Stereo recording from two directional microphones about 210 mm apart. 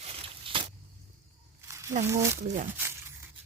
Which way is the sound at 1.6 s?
15° right (ahead or behind).